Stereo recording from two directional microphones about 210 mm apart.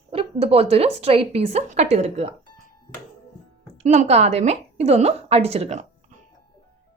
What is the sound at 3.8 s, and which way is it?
A woman's voice, 30° right (ahead or behind).